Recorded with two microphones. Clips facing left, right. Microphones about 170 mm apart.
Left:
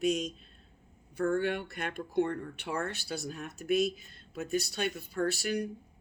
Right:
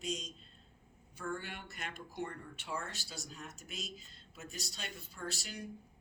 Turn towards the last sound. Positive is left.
turn(degrees=70)  # may be behind; listen again after turning